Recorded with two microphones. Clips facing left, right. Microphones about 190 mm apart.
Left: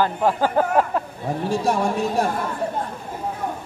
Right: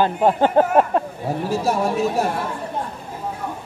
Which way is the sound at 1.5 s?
5° right (ahead or behind).